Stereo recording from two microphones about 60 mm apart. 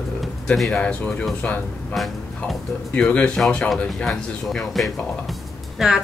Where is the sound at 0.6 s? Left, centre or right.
Centre.